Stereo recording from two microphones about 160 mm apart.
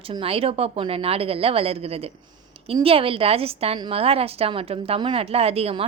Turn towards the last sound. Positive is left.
turn(degrees=-40)  # may be behind; listen again after turning